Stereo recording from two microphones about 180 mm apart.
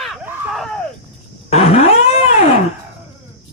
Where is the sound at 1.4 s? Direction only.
35° left (ahead or behind).